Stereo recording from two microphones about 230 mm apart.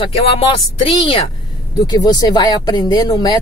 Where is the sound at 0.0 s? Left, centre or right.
Left.